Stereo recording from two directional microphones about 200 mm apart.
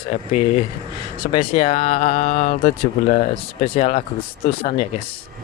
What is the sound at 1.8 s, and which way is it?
Mantra, 40° left (ahead or behind).